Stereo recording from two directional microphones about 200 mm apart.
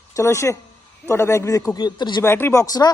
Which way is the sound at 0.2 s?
15° left (ahead or behind).